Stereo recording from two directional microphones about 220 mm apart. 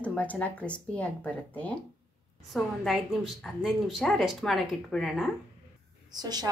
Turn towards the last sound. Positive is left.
turn(degrees=-20)  # may be behind; listen again after turning